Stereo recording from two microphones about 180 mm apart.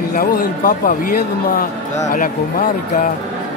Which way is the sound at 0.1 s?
55° left (ahead or behind).